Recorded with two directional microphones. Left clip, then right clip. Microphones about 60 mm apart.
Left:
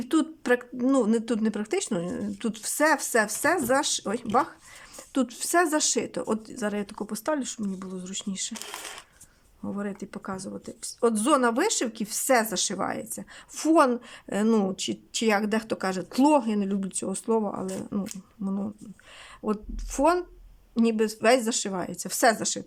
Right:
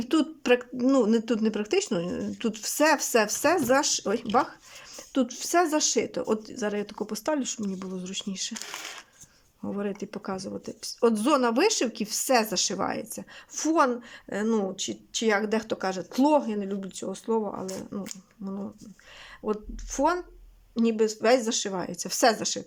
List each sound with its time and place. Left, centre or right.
0.0 s speech: centre
5.1 s speech: centre
9.6 s speech: centre
13.6 s speech: centre
14.4 s speech: left
15.3 s speech: centre
16.2 s speech: left
21.8 s speech: centre